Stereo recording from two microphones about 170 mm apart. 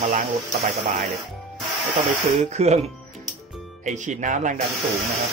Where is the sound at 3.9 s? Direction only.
45° right (ahead or behind).